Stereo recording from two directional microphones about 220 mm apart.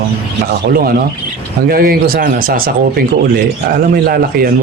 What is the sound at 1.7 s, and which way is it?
Speech, 40° right (ahead or behind).